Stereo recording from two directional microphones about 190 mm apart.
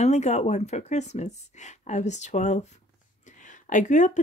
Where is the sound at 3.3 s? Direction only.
40° left (ahead or behind).